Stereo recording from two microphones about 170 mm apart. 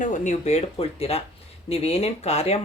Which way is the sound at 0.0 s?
45° left (ahead or behind).